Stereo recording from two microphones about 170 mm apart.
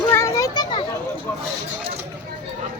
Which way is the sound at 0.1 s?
20° left (ahead or behind).